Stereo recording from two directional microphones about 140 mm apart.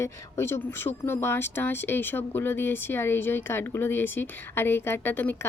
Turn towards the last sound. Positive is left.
turn(degrees=15)  # may be behind; listen again after turning